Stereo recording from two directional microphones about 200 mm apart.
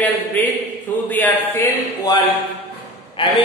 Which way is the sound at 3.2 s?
25° left (ahead or behind).